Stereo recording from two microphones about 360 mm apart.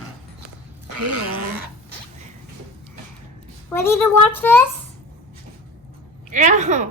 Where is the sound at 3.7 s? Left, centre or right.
Centre.